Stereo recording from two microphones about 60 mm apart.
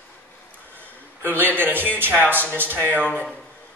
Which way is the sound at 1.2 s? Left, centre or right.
Right.